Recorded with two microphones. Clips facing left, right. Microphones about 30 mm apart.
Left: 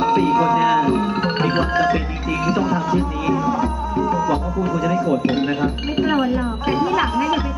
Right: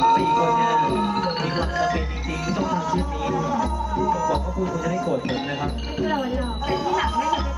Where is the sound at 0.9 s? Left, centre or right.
Centre.